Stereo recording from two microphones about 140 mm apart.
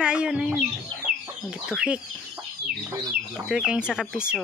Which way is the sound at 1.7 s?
5° right (ahead or behind).